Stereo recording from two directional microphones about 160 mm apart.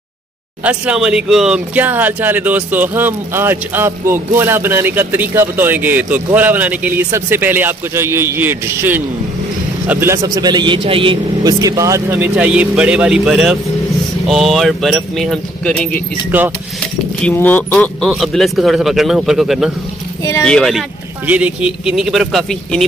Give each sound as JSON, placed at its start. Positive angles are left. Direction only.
{"t": 0.7, "sound": "a man's voice", "side_deg": -5}
{"t": 11.4, "sound": "speech", "side_deg": -20}
{"t": 16.3, "sound": "speech", "side_deg": -10}
{"t": 17.2, "sound": "speech", "side_deg": 10}
{"t": 18.0, "sound": "speech", "side_deg": 0}
{"t": 21.3, "sound": "speech", "side_deg": -10}